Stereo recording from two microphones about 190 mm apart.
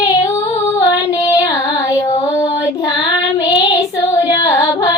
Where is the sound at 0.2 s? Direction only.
15° left (ahead or behind).